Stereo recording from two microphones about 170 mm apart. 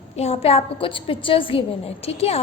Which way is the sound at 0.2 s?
35° left (ahead or behind).